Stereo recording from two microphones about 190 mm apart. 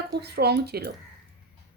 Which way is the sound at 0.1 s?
60° right (ahead or behind).